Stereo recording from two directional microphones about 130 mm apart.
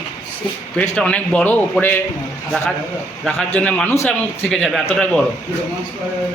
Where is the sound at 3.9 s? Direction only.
20° left (ahead or behind).